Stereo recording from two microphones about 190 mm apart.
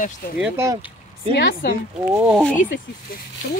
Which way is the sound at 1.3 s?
60° left (ahead or behind).